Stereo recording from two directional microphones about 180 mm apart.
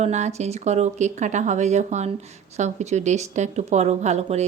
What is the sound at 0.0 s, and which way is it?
Speech, 40° right (ahead or behind).